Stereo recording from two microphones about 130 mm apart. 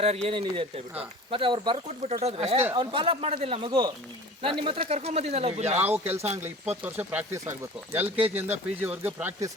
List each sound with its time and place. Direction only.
0.0 s speech: 55° right (ahead or behind); by 1.8 s 40° right (ahead or behind)
1.9 s speech: 60° right (ahead or behind)
2.7 s speech: 40° right (ahead or behind); by 5.8 s 55° right (ahead or behind)
5.8 s speech: 15° right (ahead or behind)